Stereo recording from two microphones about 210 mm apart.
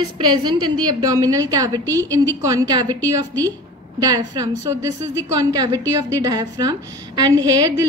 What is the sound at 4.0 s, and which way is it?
A woman's voice, 15° right (ahead or behind).